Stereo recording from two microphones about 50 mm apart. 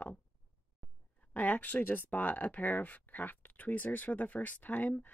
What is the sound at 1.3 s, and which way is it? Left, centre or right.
Speech, left.